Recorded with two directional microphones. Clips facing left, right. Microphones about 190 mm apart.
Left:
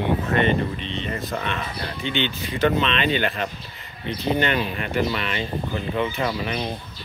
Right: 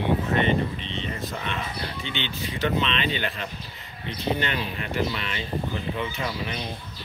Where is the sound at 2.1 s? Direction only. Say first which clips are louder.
Left 6 dB; 55° left (ahead or behind).